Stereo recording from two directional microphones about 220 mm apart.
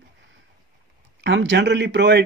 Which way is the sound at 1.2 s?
55° right (ahead or behind).